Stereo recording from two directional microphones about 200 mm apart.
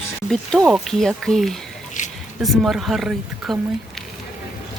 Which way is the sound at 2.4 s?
Centre (ahead or behind).